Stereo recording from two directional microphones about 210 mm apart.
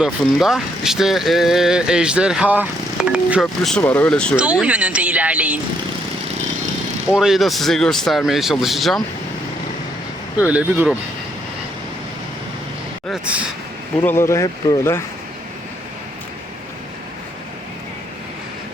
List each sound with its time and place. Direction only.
0.0 s speech: centre (ahead or behind)
7.1 s speech: centre (ahead or behind)
10.4 s speech: 5° right (ahead or behind)
13.1 s speech: 5° right (ahead or behind)
14.0 s speech: 10° left (ahead or behind)